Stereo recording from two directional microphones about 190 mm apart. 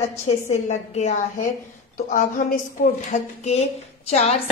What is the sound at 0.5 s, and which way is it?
A woman's voice, 35° left (ahead or behind).